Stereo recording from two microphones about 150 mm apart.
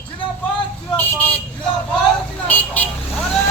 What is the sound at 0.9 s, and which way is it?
Vehicle, 10° left (ahead or behind).